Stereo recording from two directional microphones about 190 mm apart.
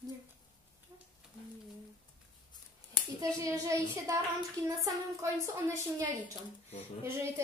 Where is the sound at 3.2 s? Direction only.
15° right (ahead or behind).